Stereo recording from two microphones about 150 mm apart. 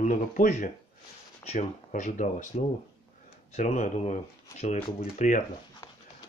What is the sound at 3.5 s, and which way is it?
Speech, 55° left (ahead or behind).